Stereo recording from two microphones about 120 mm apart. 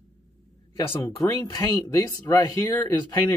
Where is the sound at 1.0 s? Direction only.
30° left (ahead or behind).